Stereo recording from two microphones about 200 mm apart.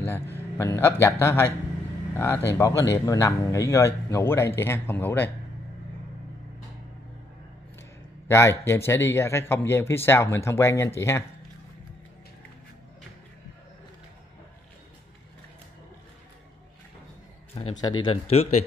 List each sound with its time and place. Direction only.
0.0 s speech: 10° left (ahead or behind)
8.3 s speech: 15° left (ahead or behind)
17.7 s speech: 20° left (ahead or behind)